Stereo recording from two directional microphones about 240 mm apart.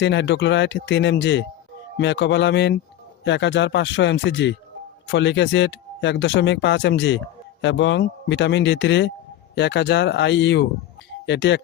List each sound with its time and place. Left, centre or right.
0.0 s speech: left